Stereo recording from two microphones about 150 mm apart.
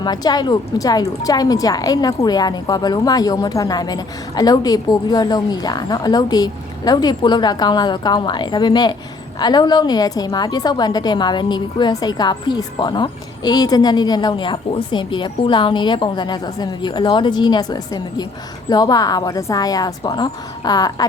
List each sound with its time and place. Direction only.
0.0 s a woman's voice: 25° left (ahead or behind)